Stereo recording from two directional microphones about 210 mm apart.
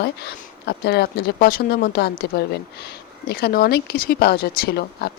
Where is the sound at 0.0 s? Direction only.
50° left (ahead or behind).